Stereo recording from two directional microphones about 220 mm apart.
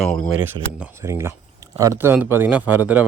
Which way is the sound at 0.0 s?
5° left (ahead or behind).